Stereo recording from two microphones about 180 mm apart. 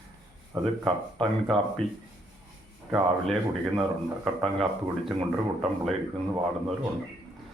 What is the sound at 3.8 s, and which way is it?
Speech, centre (ahead or behind).